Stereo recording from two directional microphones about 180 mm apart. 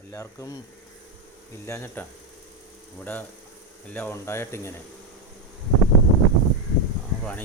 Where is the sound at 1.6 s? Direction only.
15° left (ahead or behind).